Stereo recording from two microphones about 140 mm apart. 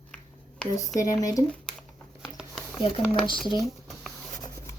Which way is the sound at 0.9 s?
25° left (ahead or behind).